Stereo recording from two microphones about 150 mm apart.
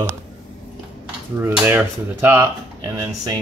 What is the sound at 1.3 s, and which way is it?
Speech, 15° right (ahead or behind).